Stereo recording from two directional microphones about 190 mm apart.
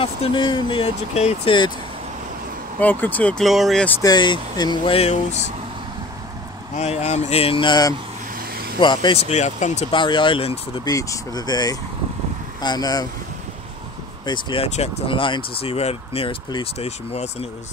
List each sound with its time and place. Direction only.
0.0 s speech: 25° left (ahead or behind)
2.8 s speech: 10° left (ahead or behind)
4.0 s speech: 20° left (ahead or behind)
6.7 s speech: 35° left (ahead or behind)
8.4 s a sound: 50° right (ahead or behind)
8.7 s speech: 25° left (ahead or behind)
9.9 s speech: 25° left (ahead or behind)
10.9 s speech: 20° left (ahead or behind)
14.2 s speech: 25° left (ahead or behind)